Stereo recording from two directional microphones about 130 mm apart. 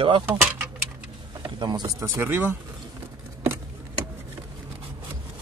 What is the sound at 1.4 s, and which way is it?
Speech, 35° right (ahead or behind).